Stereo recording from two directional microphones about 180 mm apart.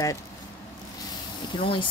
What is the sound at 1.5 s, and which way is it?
Speech, 30° left (ahead or behind).